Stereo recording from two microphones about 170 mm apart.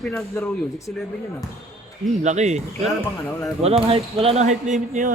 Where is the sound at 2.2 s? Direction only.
40° right (ahead or behind).